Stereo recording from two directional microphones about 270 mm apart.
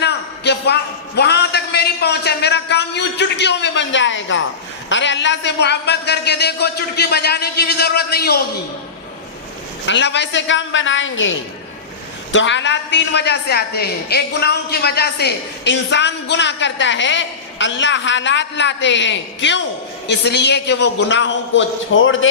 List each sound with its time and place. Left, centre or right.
0.0 s a sound: left
4.9 s a woman's voice: left
9.8 s a woman's voice: left